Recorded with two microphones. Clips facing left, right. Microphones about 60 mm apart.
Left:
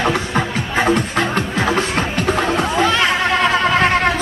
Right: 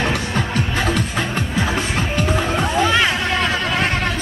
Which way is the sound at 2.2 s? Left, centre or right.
Centre.